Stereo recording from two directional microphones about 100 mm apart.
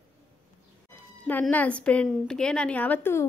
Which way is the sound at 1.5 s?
15° left (ahead or behind).